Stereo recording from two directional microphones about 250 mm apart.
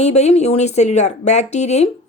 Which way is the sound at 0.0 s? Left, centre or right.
Left.